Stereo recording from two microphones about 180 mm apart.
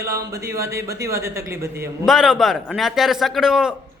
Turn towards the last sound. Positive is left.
turn(degrees=-5)  # may be behind; listen again after turning